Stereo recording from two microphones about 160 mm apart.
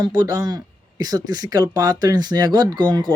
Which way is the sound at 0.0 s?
25° right (ahead or behind).